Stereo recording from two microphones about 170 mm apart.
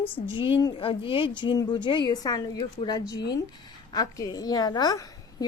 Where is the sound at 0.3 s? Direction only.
30° left (ahead or behind).